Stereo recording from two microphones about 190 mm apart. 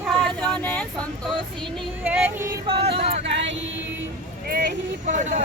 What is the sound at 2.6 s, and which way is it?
Speech, 30° right (ahead or behind).